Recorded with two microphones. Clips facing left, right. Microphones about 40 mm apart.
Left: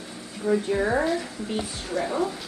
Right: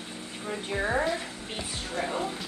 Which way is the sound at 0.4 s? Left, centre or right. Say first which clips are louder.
Left 12 dB; right.